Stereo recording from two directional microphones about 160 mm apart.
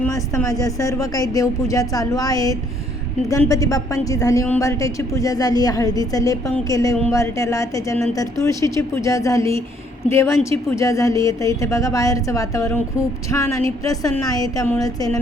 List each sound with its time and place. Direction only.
0.0 s a woman's voice: 15° left (ahead or behind)